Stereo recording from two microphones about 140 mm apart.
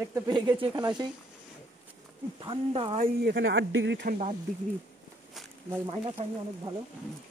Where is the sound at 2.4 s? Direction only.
35° right (ahead or behind).